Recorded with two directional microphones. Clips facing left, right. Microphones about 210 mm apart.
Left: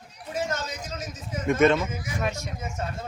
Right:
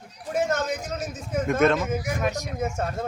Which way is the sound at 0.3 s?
50° right (ahead or behind).